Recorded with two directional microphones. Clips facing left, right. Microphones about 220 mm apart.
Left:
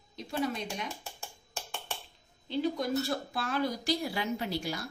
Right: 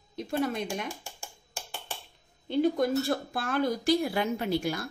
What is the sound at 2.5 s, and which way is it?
Speech, 55° right (ahead or behind).